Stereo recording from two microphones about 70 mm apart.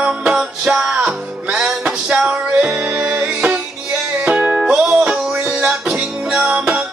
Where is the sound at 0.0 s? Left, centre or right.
Centre.